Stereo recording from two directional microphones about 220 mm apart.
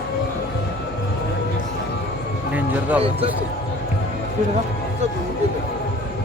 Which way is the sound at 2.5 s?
5° right (ahead or behind).